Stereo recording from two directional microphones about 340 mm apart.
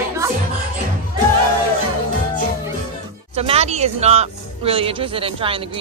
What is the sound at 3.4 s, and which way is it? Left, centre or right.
Music, centre.